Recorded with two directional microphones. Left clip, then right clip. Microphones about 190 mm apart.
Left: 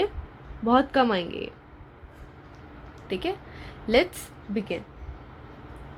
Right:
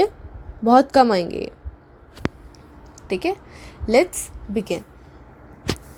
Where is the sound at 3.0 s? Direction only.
35° right (ahead or behind).